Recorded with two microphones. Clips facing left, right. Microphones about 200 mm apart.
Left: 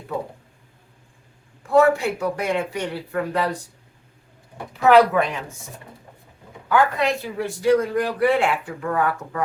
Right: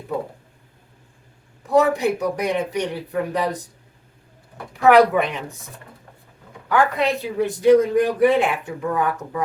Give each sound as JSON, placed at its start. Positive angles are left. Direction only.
{"t": 1.7, "sound": "speech", "side_deg": -20}
{"t": 4.9, "sound": "speech", "side_deg": -20}
{"t": 6.7, "sound": "a man's voice", "side_deg": -20}